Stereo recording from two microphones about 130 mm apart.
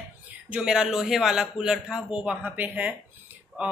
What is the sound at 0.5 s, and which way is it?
A man's voice, 5° right (ahead or behind).